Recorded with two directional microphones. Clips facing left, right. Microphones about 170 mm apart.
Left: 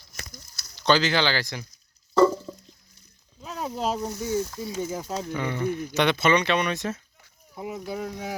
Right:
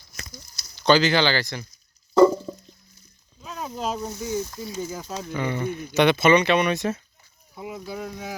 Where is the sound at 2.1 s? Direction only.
15° right (ahead or behind).